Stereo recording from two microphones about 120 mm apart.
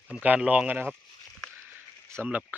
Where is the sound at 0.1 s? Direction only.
10° right (ahead or behind).